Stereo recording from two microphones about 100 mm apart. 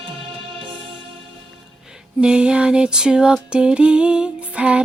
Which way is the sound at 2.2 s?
10° right (ahead or behind).